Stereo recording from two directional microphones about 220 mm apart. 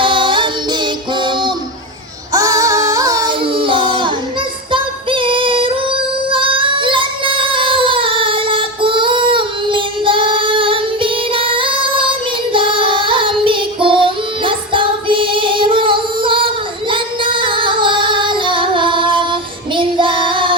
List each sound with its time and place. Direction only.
0.0 s music: 20° right (ahead or behind)
2.3 s a sound: 15° right (ahead or behind)
4.7 s female singing: 25° right (ahead or behind)
12.5 s child singing: 25° right (ahead or behind)
16.9 s music: 25° right (ahead or behind)